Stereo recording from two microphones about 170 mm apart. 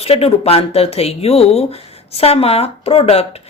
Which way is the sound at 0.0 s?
35° left (ahead or behind).